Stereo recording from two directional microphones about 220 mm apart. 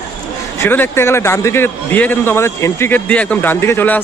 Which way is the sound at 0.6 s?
10° left (ahead or behind).